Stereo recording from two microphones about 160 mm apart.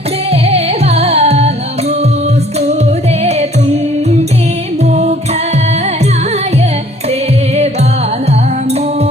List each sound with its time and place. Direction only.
0.3 s music: 40° right (ahead or behind)